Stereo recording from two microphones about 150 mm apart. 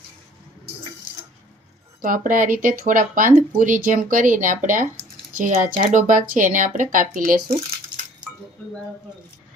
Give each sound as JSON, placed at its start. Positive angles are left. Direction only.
{"t": 2.0, "sound": "speech", "side_deg": -65}